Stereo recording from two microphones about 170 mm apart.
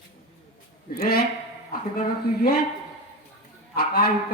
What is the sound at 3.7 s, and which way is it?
Speech, 65° left (ahead or behind).